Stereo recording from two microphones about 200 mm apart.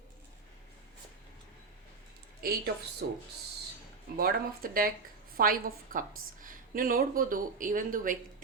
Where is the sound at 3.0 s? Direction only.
55° right (ahead or behind).